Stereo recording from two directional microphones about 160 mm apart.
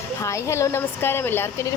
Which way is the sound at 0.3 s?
20° left (ahead or behind).